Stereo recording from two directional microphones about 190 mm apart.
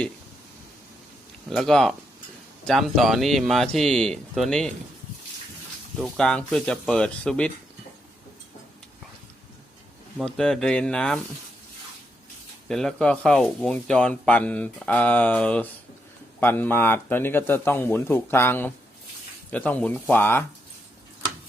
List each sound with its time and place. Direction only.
1.5 s speech: centre (ahead or behind)
6.0 s speech: 5° left (ahead or behind)
10.2 s speech: 5° left (ahead or behind)
12.6 s speech: 5° left (ahead or behind)